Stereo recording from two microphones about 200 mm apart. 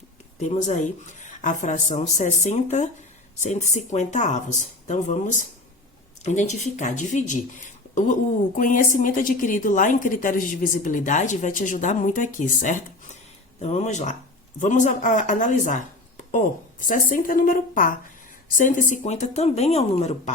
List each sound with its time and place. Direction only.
0.3 s a woman's voice: 35° left (ahead or behind)